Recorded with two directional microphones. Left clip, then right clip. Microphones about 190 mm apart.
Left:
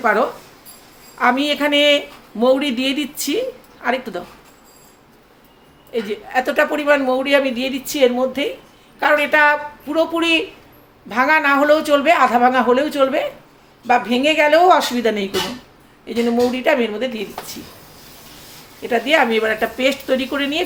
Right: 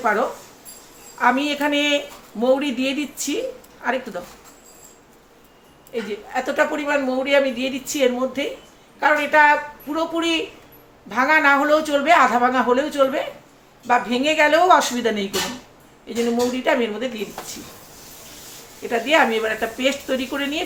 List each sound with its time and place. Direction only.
0.0 s a woman's voice: 45° left (ahead or behind)
5.9 s a woman's voice: 45° left (ahead or behind)
18.8 s a woman's voice: 40° left (ahead or behind)